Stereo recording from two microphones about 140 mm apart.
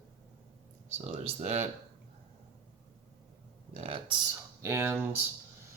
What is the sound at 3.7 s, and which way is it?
Speech, 40° right (ahead or behind).